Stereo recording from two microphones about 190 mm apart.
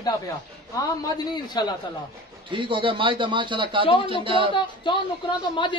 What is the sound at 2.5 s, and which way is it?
A man's voice, 25° right (ahead or behind).